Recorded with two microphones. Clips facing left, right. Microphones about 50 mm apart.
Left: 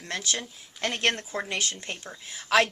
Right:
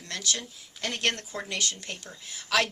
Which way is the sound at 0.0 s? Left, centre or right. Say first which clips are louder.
Left 2 dB; left.